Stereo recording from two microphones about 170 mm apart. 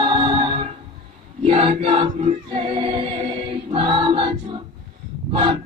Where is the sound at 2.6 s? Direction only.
30° right (ahead or behind).